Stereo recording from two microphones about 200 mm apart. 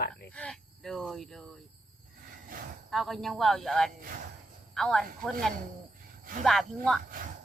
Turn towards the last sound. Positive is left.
turn(degrees=0)  # may be behind; listen again after turning